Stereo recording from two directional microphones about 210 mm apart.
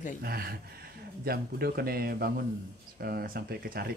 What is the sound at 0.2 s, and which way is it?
Speech, 45° right (ahead or behind).